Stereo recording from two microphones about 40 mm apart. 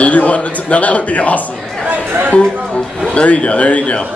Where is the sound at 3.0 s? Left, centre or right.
Left.